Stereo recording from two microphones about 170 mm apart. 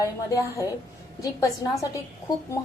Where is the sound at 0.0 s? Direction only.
20° left (ahead or behind).